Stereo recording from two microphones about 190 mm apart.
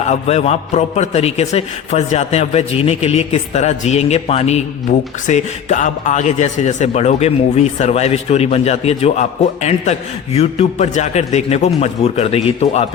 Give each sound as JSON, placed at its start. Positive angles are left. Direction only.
{"t": 0.1, "sound": "a man's voice", "side_deg": 35}